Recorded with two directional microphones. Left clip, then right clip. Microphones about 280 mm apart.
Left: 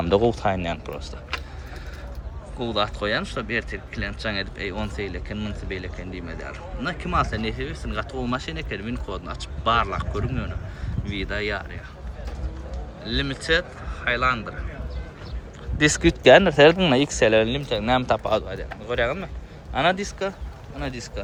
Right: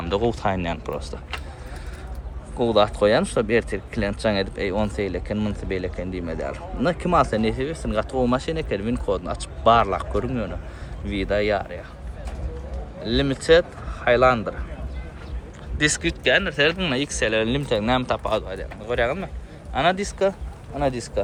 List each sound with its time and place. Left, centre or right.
0.0 s speech: centre
2.6 s speech: centre
13.1 s speech: centre
16.0 s speech: left; by 21.1 s centre